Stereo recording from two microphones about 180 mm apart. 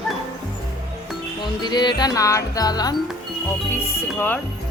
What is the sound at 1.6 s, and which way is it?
A woman's voice, 25° left (ahead or behind).